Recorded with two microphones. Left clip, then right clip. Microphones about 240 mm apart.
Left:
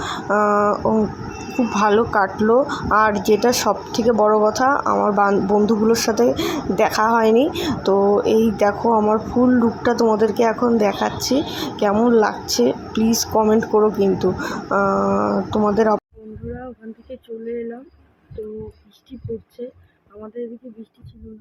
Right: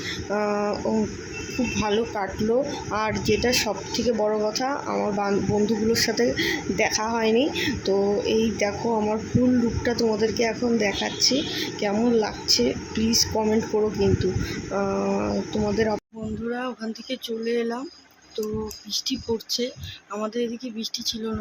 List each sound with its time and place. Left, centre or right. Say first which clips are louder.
0.3 s speech: left 9 dB; centre